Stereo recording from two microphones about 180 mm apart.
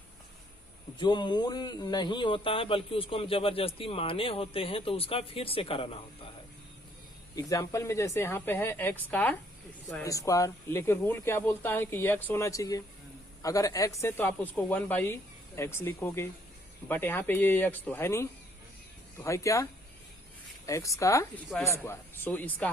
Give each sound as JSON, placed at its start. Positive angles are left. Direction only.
{"t": 0.9, "sound": "speech", "side_deg": 25}
{"t": 7.3, "sound": "speech", "side_deg": 20}
{"t": 20.7, "sound": "speech", "side_deg": 15}